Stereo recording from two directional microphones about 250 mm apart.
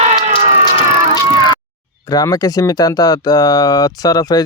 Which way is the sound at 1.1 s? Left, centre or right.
Centre.